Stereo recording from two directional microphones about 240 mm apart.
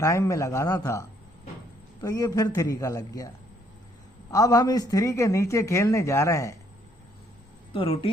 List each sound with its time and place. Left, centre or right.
0.0 s a man's voice: centre
4.3 s a man's voice: centre
7.7 s speech: left